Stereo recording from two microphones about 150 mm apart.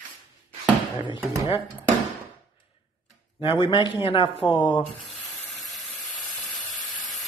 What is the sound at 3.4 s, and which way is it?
Speech, 35° left (ahead or behind).